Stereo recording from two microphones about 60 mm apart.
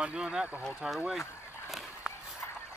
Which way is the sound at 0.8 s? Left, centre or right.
Centre.